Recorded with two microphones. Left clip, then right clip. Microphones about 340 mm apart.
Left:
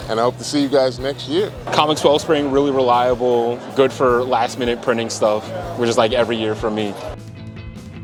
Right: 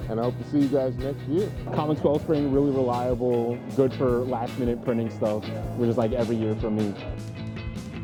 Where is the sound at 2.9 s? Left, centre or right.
Centre.